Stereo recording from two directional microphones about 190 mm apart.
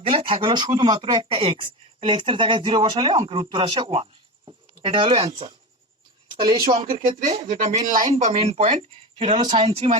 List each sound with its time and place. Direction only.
0.0 s speech: 30° right (ahead or behind)